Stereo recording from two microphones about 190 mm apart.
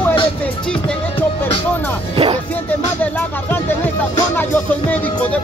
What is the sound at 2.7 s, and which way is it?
Speech, 10° left (ahead or behind).